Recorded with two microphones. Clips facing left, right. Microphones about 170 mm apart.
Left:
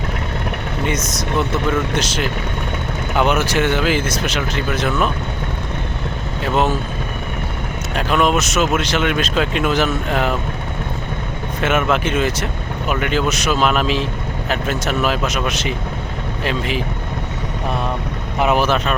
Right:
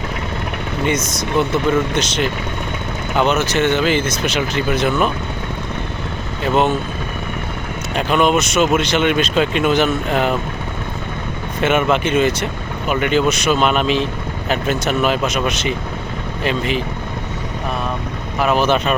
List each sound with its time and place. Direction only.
1.4 s speech: 5° left (ahead or behind)
6.4 s speech: centre (ahead or behind)
7.9 s speech: centre (ahead or behind)
11.6 s speech: centre (ahead or behind)
18.3 s speech: 20° left (ahead or behind)
18.6 s speech: centre (ahead or behind)